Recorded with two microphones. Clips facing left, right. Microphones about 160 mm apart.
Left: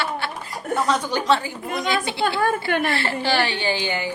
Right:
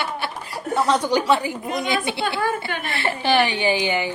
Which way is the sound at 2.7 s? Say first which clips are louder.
Left 7 dB; 55° left (ahead or behind).